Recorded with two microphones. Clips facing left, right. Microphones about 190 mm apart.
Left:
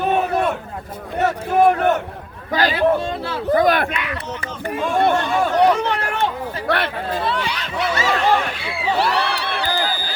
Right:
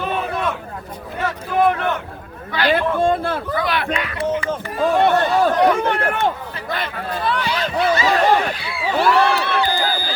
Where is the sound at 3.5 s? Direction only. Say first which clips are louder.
Left 10 dB; 45° left (ahead or behind).